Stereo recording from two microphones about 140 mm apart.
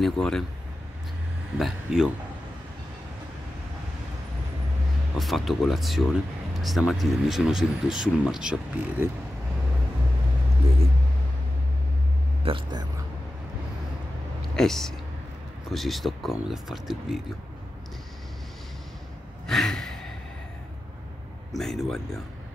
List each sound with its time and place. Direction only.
0.0 s speech: 5° left (ahead or behind)
1.6 s speech: 5° right (ahead or behind)
5.1 s speech: centre (ahead or behind)
12.4 s speech: 40° right (ahead or behind)
14.5 s speech: 5° left (ahead or behind)
19.4 s gasp: 5° left (ahead or behind)
21.5 s speech: centre (ahead or behind)